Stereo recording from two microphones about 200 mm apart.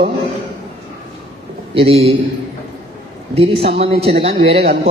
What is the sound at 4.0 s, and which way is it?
Speech, 30° right (ahead or behind).